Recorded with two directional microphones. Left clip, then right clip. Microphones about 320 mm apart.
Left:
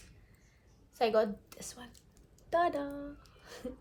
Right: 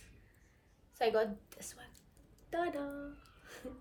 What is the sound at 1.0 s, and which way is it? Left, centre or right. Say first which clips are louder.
A woman's voice: left 3 dB; centre.